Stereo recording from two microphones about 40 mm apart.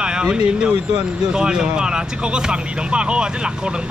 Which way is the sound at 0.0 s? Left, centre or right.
Right.